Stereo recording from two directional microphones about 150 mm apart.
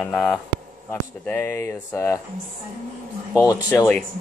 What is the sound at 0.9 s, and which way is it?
Speech, 15° left (ahead or behind).